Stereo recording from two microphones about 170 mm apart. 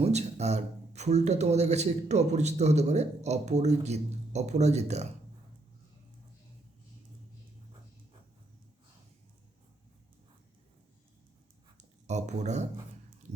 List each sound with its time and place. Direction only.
0.0 s speech: 40° right (ahead or behind)
11.8 s speech: 40° right (ahead or behind)